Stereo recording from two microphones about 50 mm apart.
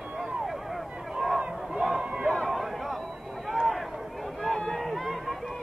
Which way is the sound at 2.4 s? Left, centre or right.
Centre.